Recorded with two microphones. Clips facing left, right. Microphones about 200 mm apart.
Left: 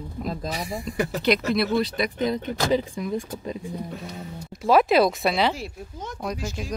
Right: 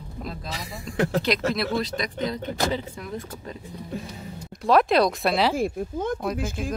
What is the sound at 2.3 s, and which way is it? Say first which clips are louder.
Speech: left 4 dB; 15° left (ahead or behind).